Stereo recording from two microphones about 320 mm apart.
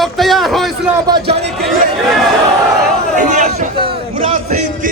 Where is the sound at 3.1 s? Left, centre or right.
Right.